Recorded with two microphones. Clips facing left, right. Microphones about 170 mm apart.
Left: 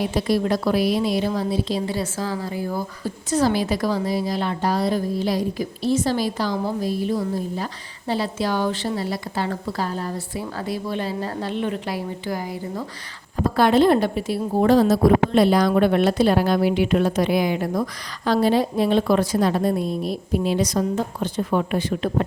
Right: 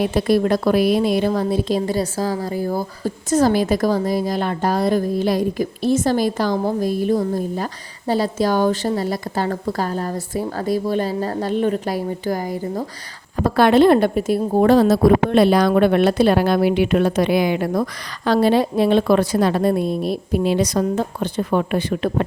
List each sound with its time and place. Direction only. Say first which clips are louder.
0.0 s a woman's voice: right 4 dB; 55° right (ahead or behind)
13.4 s a woman's voice: right 3 dB; 70° right (ahead or behind)